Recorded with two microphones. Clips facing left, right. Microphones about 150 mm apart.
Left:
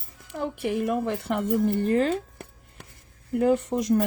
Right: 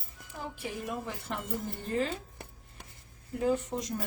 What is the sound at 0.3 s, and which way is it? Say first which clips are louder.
Speech: left 11 dB; 70° left (ahead or behind).